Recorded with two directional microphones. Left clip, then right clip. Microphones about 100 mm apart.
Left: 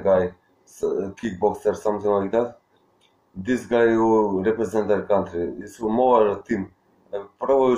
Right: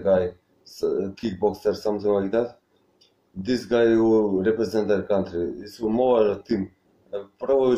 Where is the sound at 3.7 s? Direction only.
25° right (ahead or behind).